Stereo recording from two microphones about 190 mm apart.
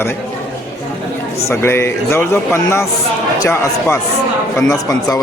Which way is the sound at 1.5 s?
15° left (ahead or behind).